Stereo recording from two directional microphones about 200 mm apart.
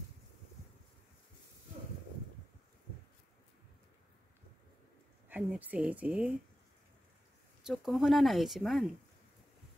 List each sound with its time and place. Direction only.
5.3 s speech: 10° right (ahead or behind)
7.6 s speech: centre (ahead or behind)